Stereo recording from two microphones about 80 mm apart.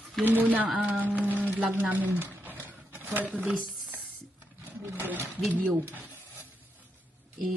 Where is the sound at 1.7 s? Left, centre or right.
Right.